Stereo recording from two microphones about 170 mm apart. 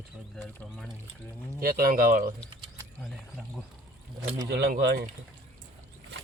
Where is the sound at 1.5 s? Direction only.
60° right (ahead or behind).